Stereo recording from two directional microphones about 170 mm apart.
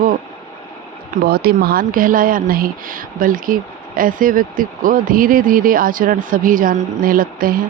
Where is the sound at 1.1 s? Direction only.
65° right (ahead or behind).